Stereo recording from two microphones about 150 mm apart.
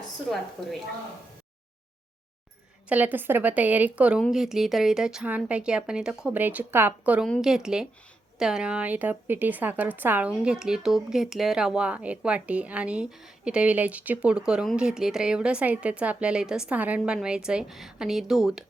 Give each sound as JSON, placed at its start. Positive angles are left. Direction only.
{"t": 0.3, "sound": "speech", "side_deg": 0}
{"t": 2.9, "sound": "a woman's voice", "side_deg": -10}
{"t": 7.3, "sound": "a woman's voice", "side_deg": 0}